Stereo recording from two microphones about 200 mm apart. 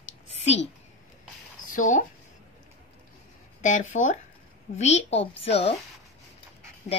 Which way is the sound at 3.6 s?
35° left (ahead or behind).